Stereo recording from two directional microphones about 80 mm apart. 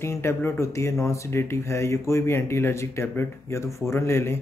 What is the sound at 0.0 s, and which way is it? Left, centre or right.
A man's voice, left.